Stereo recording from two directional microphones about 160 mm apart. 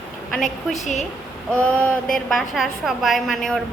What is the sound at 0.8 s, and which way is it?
Speech, 50° left (ahead or behind).